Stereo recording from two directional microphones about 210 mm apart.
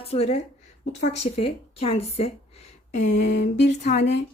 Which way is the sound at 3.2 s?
35° left (ahead or behind).